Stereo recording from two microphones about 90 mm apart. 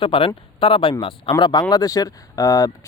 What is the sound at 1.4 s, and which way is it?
Speech, 50° left (ahead or behind).